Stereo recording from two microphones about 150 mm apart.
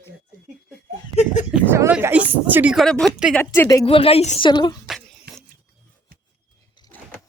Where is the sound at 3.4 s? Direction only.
20° left (ahead or behind).